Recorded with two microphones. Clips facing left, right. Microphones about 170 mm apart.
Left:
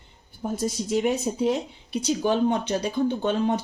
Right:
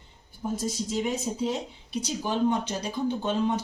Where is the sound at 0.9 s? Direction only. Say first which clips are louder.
Left 7 dB; 65° left (ahead or behind).